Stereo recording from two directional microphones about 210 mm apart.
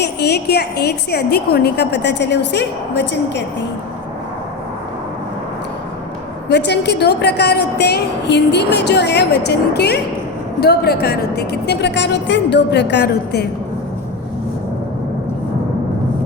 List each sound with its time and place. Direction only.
0.0 s a woman's voice: 50° left (ahead or behind)
6.5 s a woman's voice: 55° left (ahead or behind)